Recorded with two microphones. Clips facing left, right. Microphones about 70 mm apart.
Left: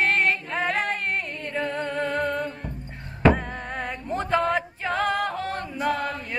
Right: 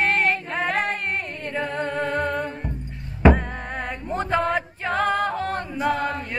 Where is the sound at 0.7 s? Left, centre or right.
Right.